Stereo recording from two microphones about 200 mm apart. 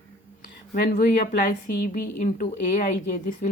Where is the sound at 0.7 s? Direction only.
45° left (ahead or behind).